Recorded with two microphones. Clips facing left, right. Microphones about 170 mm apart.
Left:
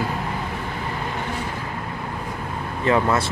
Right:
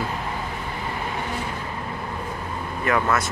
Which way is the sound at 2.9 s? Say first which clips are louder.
Left 3 dB; 20° left (ahead or behind).